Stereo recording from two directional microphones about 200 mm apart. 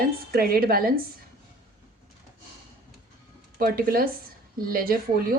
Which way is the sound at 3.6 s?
45° right (ahead or behind).